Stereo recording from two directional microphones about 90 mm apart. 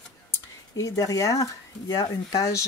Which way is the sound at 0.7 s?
40° left (ahead or behind).